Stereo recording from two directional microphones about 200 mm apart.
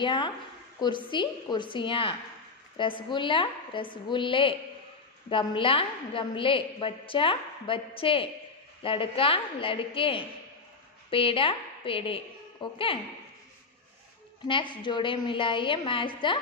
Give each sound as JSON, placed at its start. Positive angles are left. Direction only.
{"t": 0.0, "sound": "a woman's voice", "side_deg": 25}
{"t": 14.5, "sound": "a woman's voice", "side_deg": 25}